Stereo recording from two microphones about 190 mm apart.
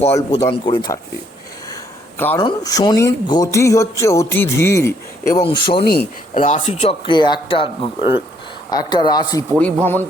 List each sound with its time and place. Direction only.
0.3 s speech: 20° left (ahead or behind)
1.7 s a sound: 10° left (ahead or behind)
2.4 s speech: 20° left (ahead or behind)
5.4 s speech: 25° left (ahead or behind)
6.3 s speech: 40° left (ahead or behind); by 9.4 s 20° left (ahead or behind)
9.6 s speech: 10° left (ahead or behind)